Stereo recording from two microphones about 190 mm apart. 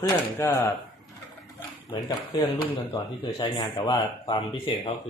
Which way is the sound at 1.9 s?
20° left (ahead or behind).